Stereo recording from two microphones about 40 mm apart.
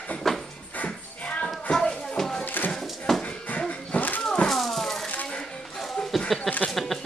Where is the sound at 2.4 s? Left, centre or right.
Left.